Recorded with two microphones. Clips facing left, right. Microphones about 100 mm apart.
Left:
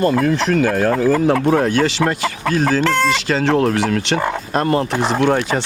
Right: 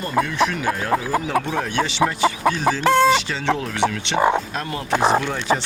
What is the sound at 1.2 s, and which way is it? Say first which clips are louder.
Speech: left 8 dB; 60° left (ahead or behind).